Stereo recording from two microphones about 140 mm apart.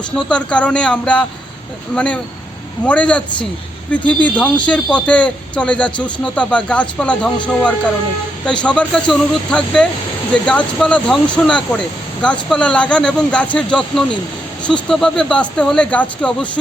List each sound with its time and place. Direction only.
0.2 s speech: 10° left (ahead or behind)
2.8 s speech: 10° left (ahead or behind)
4.4 s speech: 10° left (ahead or behind)